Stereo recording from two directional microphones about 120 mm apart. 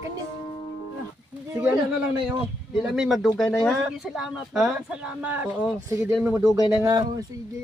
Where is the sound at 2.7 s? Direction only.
5° right (ahead or behind); by 7.2 s 30° right (ahead or behind).